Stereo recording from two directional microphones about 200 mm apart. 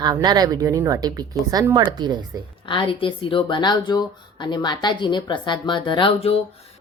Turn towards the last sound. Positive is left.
turn(degrees=25)  # may be behind; listen again after turning